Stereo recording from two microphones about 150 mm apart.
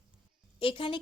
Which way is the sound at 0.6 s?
35° left (ahead or behind).